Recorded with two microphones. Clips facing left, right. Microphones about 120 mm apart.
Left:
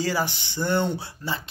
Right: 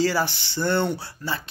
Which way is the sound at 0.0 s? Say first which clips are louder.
Right 3 dB; 20° left (ahead or behind).